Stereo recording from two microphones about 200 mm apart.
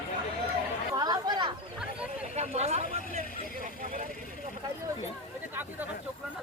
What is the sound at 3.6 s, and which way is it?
Vehicle, 40° right (ahead or behind).